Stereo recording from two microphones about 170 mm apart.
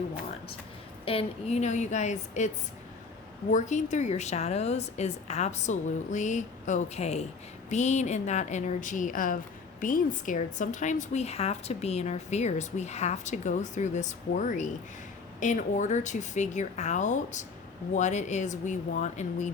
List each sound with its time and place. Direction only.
1.0 s a woman's voice: 35° left (ahead or behind)
3.5 s a woman's voice: 45° left (ahead or behind)